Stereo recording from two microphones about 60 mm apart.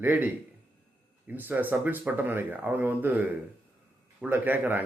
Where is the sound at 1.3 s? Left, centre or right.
Right.